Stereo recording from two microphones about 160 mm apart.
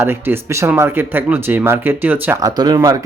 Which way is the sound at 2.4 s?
25° right (ahead or behind).